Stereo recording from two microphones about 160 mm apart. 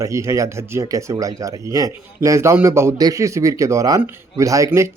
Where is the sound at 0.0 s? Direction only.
20° right (ahead or behind).